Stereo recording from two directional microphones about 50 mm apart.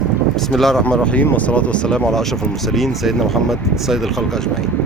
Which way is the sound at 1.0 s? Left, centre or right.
Left.